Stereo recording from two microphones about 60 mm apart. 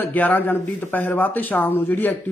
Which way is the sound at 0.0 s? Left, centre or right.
Left.